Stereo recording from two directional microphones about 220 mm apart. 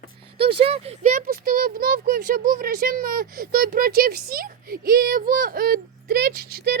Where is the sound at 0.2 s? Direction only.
25° right (ahead or behind).